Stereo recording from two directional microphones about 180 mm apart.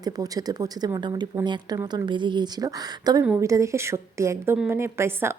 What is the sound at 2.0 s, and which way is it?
A woman's voice, 25° right (ahead or behind).